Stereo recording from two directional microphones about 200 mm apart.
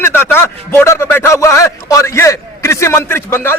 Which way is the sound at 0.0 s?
10° left (ahead or behind).